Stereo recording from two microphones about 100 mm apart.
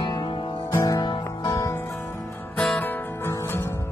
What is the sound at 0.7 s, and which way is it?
Music, 35° left (ahead or behind).